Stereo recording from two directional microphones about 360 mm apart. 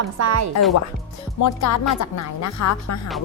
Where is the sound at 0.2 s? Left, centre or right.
Right.